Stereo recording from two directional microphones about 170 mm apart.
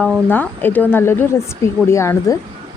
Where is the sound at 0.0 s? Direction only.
10° left (ahead or behind).